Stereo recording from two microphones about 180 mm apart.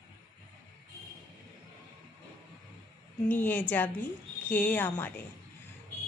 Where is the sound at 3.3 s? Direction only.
10° left (ahead or behind).